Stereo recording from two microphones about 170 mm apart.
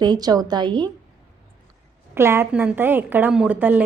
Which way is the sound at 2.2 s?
15° right (ahead or behind).